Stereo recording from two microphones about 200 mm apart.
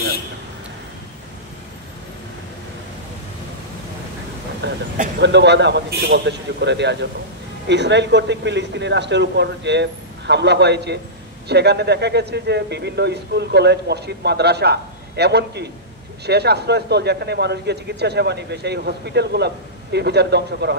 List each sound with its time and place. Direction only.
4.6 s speech: 60° right (ahead or behind)